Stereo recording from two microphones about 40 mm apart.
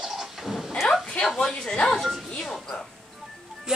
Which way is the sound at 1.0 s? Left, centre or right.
Left.